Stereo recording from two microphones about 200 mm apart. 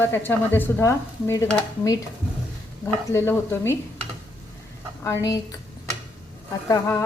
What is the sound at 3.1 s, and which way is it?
Speech, 10° left (ahead or behind).